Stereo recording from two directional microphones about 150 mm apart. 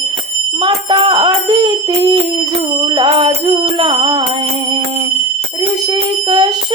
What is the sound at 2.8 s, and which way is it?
Bicycle bell, 30° right (ahead or behind).